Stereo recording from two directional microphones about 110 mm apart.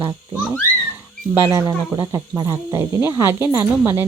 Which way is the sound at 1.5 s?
35° right (ahead or behind).